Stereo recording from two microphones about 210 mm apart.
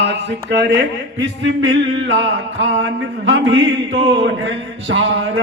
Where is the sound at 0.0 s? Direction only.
55° right (ahead or behind).